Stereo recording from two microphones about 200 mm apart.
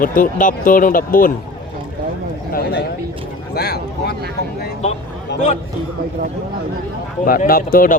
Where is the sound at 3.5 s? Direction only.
55° left (ahead or behind).